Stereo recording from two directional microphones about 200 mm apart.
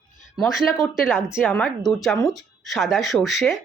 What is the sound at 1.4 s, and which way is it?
Speech, 10° left (ahead or behind).